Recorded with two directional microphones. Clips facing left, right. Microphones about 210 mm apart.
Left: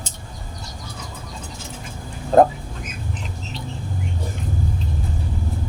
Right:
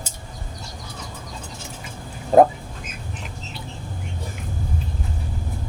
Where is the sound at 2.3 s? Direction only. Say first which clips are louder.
Even; 5° right (ahead or behind).